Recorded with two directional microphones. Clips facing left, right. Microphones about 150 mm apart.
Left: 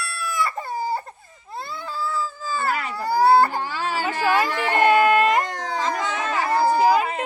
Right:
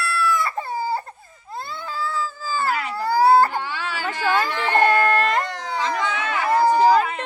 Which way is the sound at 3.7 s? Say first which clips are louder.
Left 3 dB; 40° left (ahead or behind).